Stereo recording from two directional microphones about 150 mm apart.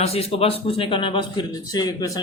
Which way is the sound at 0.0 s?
40° left (ahead or behind).